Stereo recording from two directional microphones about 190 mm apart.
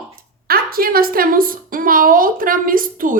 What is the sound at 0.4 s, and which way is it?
A woman's voice, 50° right (ahead or behind).